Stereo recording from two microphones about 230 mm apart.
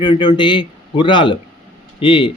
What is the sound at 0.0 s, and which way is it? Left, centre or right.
Speech, centre.